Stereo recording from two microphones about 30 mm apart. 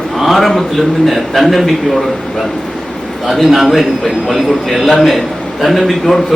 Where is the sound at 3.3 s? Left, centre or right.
Centre.